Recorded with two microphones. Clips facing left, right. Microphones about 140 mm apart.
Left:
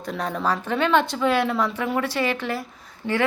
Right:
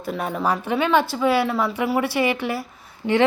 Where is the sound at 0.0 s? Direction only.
5° right (ahead or behind).